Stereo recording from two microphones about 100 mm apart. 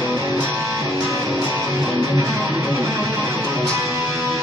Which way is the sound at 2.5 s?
30° right (ahead or behind).